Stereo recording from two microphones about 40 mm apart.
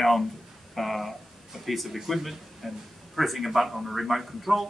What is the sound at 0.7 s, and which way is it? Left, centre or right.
A man's voice, centre.